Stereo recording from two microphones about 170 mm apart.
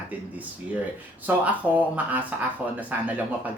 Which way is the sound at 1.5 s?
10° right (ahead or behind).